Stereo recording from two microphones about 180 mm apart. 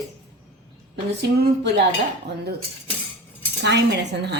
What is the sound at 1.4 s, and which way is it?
Speech, 65° right (ahead or behind).